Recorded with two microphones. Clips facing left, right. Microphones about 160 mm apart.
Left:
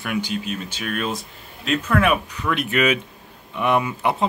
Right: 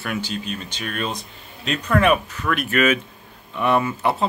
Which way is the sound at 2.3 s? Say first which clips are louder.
Even; 20° left (ahead or behind).